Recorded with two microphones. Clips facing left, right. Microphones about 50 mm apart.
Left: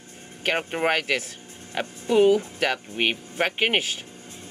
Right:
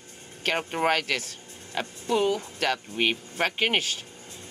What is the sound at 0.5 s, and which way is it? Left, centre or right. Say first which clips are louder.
Speech: left 1 dB; centre.